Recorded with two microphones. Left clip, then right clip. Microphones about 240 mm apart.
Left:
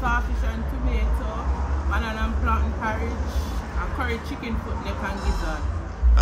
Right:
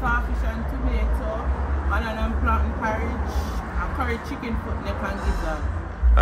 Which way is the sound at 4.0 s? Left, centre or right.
Centre.